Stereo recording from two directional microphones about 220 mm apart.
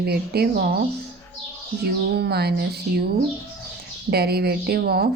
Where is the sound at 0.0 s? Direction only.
45° right (ahead or behind).